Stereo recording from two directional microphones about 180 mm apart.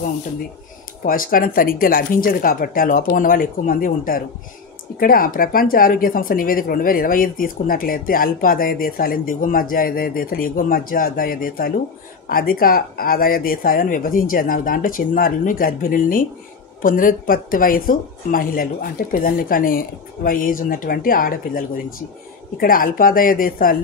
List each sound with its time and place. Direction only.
1.0 s speech: 50° left (ahead or behind)